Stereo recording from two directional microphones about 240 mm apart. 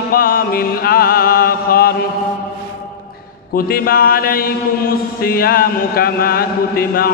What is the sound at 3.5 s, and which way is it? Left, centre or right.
Mantra, left.